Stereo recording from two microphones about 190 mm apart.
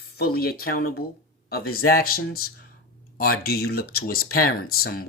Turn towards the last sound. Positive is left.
turn(degrees=50)  # may be behind; listen again after turning